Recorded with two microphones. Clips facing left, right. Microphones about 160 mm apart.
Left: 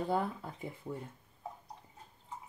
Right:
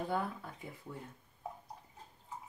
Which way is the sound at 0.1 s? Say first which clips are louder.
Left 3 dB; 20° left (ahead or behind).